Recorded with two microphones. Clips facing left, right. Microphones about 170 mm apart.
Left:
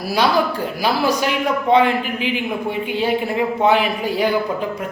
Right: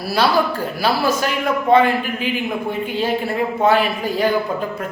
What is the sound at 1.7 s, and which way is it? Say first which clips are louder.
Speech: right 1 dB; 15° left (ahead or behind).